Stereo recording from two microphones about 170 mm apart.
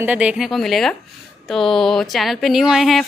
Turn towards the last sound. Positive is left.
turn(degrees=0)  # may be behind; listen again after turning